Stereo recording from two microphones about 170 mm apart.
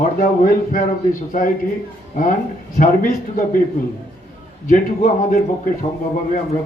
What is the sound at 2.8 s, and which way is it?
Speech, 50° left (ahead or behind).